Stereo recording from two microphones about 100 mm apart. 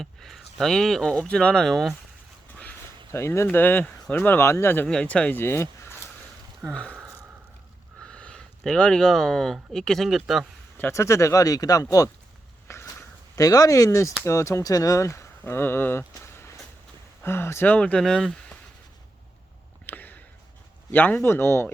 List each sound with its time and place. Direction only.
0.0 s speech: 5° left (ahead or behind)
3.1 s speech: 25° left (ahead or behind)
4.9 s speech: 10° left (ahead or behind)
6.7 s a sound: 10° left (ahead or behind)
8.0 s speech: 10° left (ahead or behind)
10.9 s speech: 30° left (ahead or behind)
12.6 s a sound: 25° left (ahead or behind)
14.2 s speech: 30° left (ahead or behind); by 18.5 s 5° left (ahead or behind)
19.8 s a sound: 20° left (ahead or behind)
20.9 s speech: 15° left (ahead or behind)